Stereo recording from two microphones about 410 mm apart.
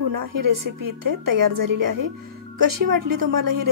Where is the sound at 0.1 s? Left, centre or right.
Right.